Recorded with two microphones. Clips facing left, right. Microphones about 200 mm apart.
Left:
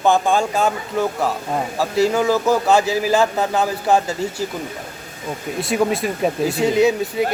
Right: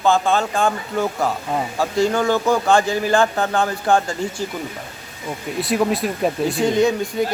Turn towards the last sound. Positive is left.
turn(degrees=5)  # may be behind; listen again after turning